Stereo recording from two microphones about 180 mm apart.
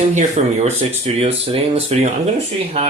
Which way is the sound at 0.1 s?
40° right (ahead or behind).